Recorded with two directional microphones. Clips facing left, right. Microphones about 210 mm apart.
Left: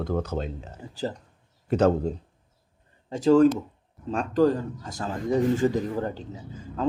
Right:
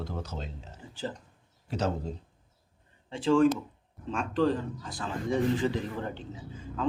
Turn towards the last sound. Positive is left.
turn(degrees=40)  # may be behind; listen again after turning